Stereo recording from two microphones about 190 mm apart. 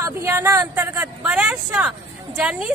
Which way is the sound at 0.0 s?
15° right (ahead or behind).